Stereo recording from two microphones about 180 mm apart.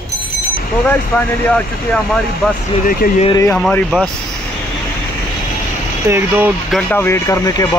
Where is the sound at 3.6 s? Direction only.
5° left (ahead or behind).